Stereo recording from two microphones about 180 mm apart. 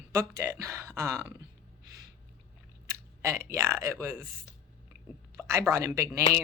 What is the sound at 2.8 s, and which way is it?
Speech, 15° right (ahead or behind).